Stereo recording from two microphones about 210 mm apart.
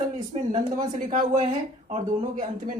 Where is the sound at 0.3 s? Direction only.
30° right (ahead or behind).